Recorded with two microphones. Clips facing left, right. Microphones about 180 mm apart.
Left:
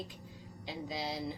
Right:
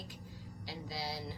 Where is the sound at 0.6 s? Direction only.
20° left (ahead or behind).